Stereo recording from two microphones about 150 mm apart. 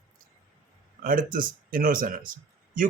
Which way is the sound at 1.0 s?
65° right (ahead or behind).